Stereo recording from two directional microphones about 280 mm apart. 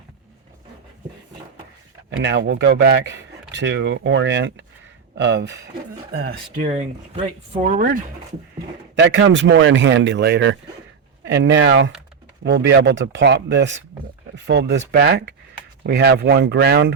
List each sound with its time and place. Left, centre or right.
2.0 s speech: right
9.0 s speech: right